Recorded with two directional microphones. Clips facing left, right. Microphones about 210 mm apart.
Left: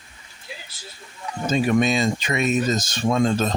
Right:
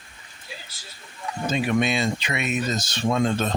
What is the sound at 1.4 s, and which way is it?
Speech, 40° left (ahead or behind).